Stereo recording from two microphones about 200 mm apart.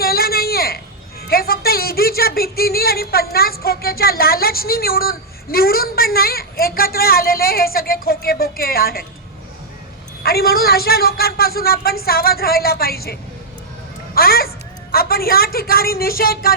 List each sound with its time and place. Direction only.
0.0 s a sound: 50° left (ahead or behind)
1.3 s speech: 50° left (ahead or behind)
10.2 s speech: 50° left (ahead or behind)
14.2 s speech: 50° left (ahead or behind)